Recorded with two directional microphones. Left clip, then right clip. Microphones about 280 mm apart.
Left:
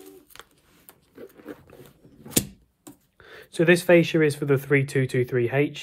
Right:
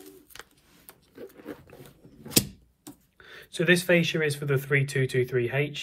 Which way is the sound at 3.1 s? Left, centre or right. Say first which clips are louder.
Left 6 dB; centre.